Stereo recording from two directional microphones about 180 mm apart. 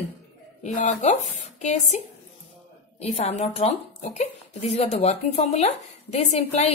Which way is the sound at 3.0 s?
35° left (ahead or behind).